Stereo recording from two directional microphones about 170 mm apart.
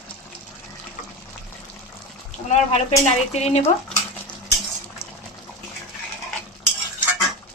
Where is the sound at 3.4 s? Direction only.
40° left (ahead or behind).